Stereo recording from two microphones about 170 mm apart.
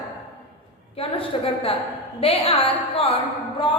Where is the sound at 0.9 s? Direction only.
35° left (ahead or behind).